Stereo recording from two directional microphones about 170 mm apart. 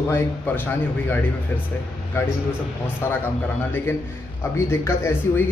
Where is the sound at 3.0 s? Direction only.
15° left (ahead or behind).